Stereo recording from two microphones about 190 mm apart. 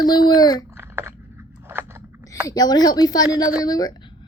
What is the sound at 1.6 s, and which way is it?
Chewing, 10° right (ahead or behind).